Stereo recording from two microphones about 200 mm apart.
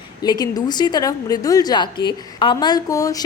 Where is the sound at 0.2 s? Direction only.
20° left (ahead or behind).